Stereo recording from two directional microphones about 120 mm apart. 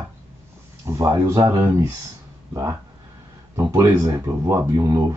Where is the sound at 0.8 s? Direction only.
25° right (ahead or behind).